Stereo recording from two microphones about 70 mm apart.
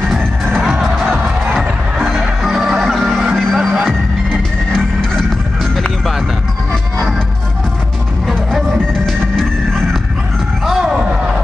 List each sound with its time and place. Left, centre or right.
0.1 s music: centre
1.1 s music: right
1.6 s music: centre
4.3 s music: centre
8.3 s music: centre
10.6 s a sound: centre